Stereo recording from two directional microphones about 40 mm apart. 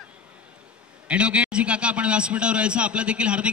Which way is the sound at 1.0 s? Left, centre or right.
Right.